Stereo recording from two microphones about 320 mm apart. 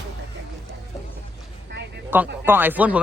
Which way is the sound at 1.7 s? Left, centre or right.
Right.